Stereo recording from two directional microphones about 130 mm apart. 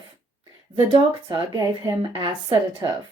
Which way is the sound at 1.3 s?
35° right (ahead or behind).